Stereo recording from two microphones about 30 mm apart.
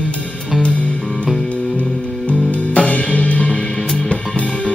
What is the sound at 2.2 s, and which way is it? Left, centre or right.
Music, left.